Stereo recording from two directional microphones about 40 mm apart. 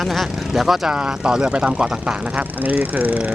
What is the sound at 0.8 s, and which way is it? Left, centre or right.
Speech, right.